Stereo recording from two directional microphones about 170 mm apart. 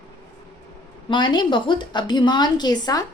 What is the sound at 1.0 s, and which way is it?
Speech, 25° left (ahead or behind).